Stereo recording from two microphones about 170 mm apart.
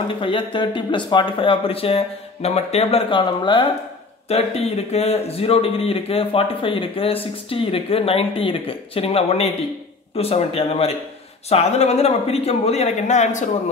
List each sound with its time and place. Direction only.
0.1 s speech: 30° left (ahead or behind)